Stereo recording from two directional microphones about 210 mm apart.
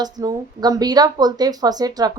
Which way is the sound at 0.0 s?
20° right (ahead or behind).